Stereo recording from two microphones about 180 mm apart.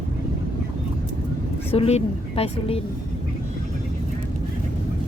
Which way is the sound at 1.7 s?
35° left (ahead or behind).